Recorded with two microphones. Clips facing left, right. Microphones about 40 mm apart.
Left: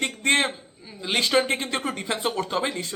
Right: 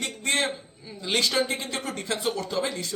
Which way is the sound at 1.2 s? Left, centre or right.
Left.